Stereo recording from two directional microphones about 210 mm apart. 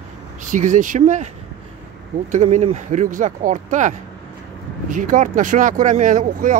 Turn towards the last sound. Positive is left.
turn(degrees=-40)  # may be behind; listen again after turning